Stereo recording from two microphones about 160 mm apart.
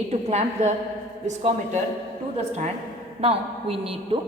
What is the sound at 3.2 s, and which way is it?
Speech, 35° right (ahead or behind).